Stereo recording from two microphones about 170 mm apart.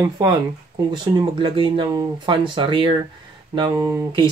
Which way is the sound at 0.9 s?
30° right (ahead or behind).